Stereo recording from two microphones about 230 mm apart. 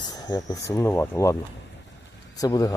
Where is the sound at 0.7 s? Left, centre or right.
Centre.